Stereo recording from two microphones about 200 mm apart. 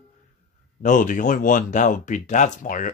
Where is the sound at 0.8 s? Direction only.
40° left (ahead or behind).